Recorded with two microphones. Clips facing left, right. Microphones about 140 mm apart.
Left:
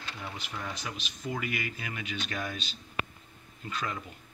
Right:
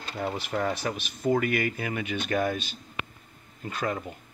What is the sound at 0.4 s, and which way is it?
Speech, 60° right (ahead or behind).